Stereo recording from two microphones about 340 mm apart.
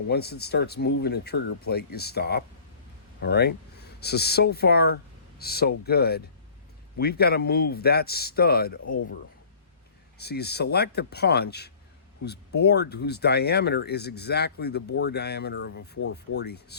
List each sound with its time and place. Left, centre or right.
0.1 s speech: left
10.2 s speech: left